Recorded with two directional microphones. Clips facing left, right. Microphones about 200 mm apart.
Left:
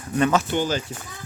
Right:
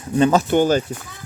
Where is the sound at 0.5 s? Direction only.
50° right (ahead or behind).